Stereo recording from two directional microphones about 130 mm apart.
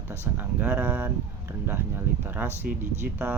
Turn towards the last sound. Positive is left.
turn(degrees=-15)  # may be behind; listen again after turning